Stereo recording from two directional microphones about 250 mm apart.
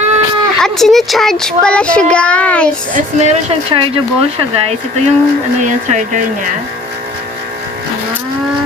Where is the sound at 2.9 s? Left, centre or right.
Right.